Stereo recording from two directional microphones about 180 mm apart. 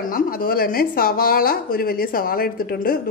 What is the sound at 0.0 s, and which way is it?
A woman's voice, 50° left (ahead or behind).